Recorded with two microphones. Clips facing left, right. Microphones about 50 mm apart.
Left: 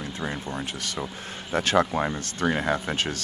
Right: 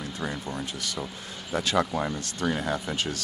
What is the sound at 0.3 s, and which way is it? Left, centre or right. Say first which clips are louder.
Speech: left 2 dB; left.